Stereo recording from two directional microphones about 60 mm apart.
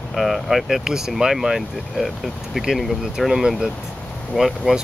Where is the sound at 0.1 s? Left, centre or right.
Centre.